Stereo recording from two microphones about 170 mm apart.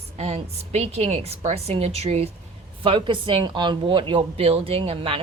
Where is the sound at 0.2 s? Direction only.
35° right (ahead or behind).